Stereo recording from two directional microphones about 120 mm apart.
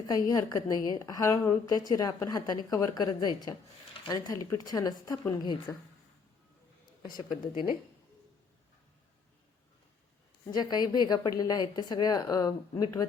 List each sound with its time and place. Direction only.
0.1 s a woman's voice: 30° left (ahead or behind)
10.4 s a woman's voice: 35° left (ahead or behind)